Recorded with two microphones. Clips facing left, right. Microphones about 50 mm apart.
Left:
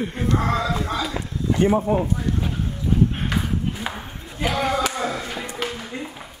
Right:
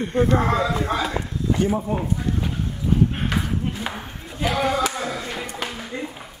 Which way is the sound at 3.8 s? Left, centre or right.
Centre.